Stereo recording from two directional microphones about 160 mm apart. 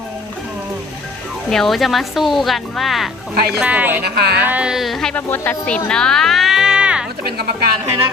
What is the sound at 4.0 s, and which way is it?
Speech, 90° right.